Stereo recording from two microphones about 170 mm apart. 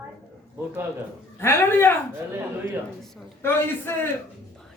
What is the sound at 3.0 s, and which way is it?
Speech, centre (ahead or behind).